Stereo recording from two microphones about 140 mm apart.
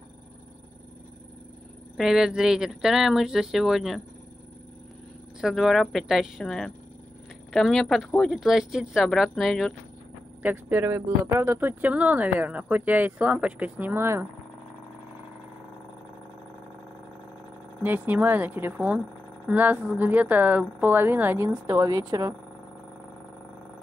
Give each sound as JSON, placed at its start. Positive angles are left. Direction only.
{"t": 2.0, "sound": "speech", "side_deg": -5}
{"t": 5.4, "sound": "speech", "side_deg": 0}
{"t": 10.4, "sound": "speech", "side_deg": -15}
{"t": 17.8, "sound": "speech", "side_deg": -15}
{"t": 21.6, "sound": "a woman's voice", "side_deg": -25}